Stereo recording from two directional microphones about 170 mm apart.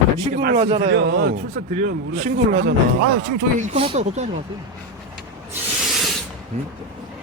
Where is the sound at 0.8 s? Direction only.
85° right.